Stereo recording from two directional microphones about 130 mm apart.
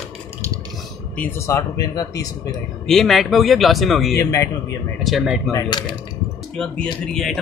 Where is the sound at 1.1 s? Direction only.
20° left (ahead or behind).